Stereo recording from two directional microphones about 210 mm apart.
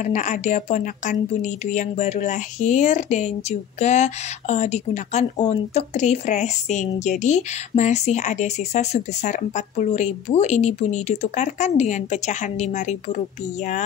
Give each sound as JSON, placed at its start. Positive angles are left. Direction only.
{"t": 0.0, "sound": "speech", "side_deg": 35}